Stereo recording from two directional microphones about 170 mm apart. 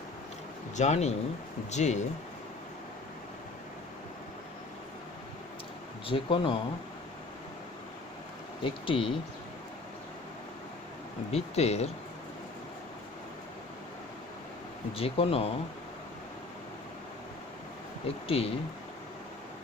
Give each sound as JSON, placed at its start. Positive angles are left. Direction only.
{"t": 0.8, "sound": "speech", "side_deg": 40}
{"t": 6.1, "sound": "speech", "side_deg": 30}
{"t": 8.6, "sound": "speech", "side_deg": 30}
{"t": 11.3, "sound": "speech", "side_deg": 40}
{"t": 14.9, "sound": "speech", "side_deg": 35}
{"t": 18.3, "sound": "speech", "side_deg": 35}